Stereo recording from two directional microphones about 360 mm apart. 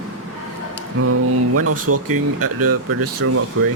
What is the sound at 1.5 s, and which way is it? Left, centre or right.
Speech, right.